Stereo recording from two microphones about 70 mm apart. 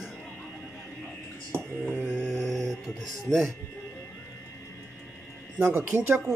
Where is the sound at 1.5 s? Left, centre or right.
Right.